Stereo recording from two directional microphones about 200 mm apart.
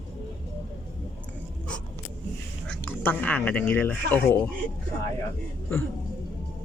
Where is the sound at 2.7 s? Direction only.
10° left (ahead or behind).